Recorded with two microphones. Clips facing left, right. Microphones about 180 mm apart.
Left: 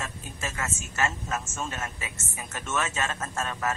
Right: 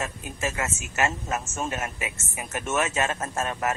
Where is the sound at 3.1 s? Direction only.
35° right (ahead or behind).